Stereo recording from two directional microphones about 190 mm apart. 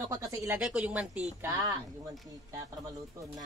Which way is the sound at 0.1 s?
15° right (ahead or behind).